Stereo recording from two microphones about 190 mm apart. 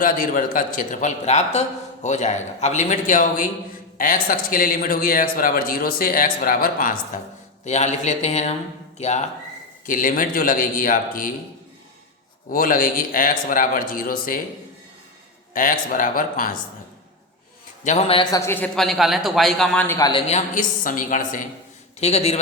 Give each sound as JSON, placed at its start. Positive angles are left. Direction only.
{"t": 0.0, "sound": "a man's voice", "side_deg": 45}
{"t": 12.5, "sound": "a man's voice", "side_deg": 50}
{"t": 15.5, "sound": "a man's voice", "side_deg": 45}
{"t": 17.8, "sound": "a man's voice", "side_deg": 35}
{"t": 18.2, "sound": "a man's voice", "side_deg": 15}
{"t": 20.0, "sound": "a man's voice", "side_deg": 25}